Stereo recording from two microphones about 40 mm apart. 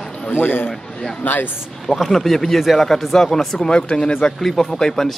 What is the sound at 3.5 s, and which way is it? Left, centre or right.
Speech, left.